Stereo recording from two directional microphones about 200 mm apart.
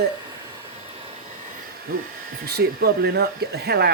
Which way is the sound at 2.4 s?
55° right (ahead or behind).